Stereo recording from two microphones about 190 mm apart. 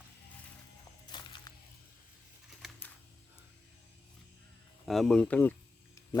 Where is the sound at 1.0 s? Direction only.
25° left (ahead or behind).